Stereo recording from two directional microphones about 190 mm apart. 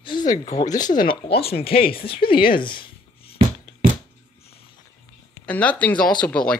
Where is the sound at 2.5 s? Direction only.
25° left (ahead or behind).